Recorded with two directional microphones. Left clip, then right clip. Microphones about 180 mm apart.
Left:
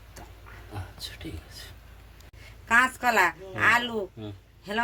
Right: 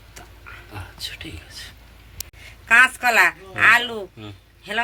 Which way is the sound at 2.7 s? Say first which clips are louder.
Right 7 dB; 25° left (ahead or behind).